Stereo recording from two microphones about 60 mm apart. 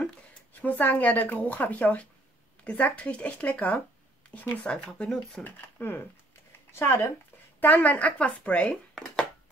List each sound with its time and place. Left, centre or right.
0.6 s speech: left; by 5.4 s centre
5.4 s speech: left
6.7 s speech: left
7.6 s speech: left
8.9 s a sound: centre